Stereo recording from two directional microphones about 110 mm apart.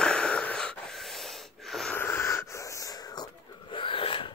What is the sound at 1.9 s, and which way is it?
Wheeze, 20° left (ahead or behind).